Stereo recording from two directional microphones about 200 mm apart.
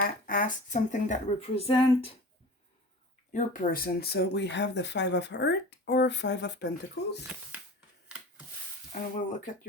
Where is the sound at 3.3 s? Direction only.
45° left (ahead or behind); by 6.7 s 60° left (ahead or behind).